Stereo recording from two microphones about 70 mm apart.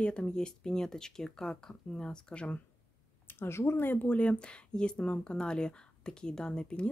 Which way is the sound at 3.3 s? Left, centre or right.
Left.